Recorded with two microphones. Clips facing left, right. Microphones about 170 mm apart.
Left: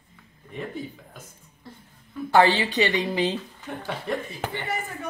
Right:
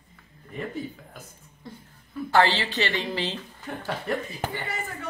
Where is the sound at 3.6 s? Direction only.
Centre (ahead or behind).